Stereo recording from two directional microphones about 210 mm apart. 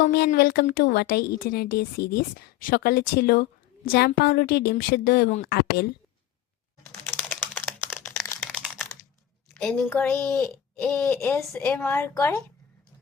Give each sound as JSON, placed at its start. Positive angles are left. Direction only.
{"t": 0.0, "sound": "a woman's voice", "side_deg": 50}
{"t": 7.3, "sound": "a sound", "side_deg": 10}
{"t": 9.6, "sound": "speech", "side_deg": 5}